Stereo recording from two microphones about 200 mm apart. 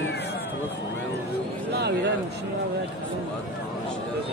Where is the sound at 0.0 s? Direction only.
55° left (ahead or behind).